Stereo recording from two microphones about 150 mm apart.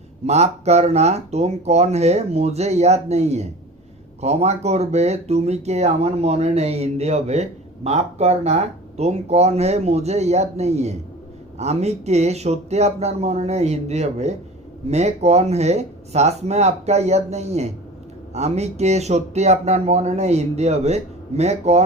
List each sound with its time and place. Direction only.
0.3 s speech: 45° right (ahead or behind)